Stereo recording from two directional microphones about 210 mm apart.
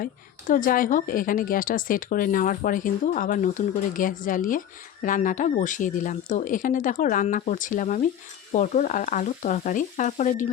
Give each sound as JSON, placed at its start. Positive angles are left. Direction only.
{"t": 0.0, "sound": "speech", "side_deg": 40}